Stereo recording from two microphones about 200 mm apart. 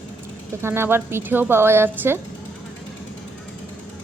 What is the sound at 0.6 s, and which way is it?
A woman's voice, 10° right (ahead or behind).